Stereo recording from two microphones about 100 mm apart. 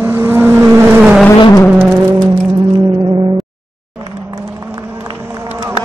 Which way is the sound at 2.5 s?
50° right (ahead or behind).